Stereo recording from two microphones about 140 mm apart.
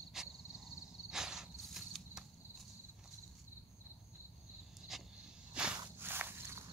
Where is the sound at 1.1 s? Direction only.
5° right (ahead or behind).